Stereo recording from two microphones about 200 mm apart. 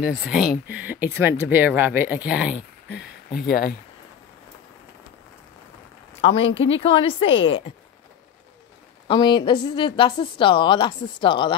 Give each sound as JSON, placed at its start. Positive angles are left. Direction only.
{"t": 0.2, "sound": "speech", "side_deg": -5}
{"t": 2.9, "sound": "speech", "side_deg": 50}
{"t": 6.4, "sound": "speech", "side_deg": 70}
{"t": 6.8, "sound": "a woman's voice", "side_deg": 25}
{"t": 9.0, "sound": "a woman's voice", "side_deg": 25}